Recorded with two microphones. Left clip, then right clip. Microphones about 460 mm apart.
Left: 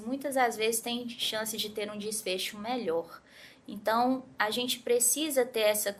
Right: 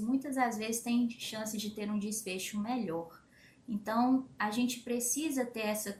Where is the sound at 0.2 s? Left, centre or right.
Left.